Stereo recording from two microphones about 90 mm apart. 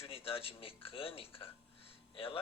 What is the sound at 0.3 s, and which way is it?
Speech, 90° left.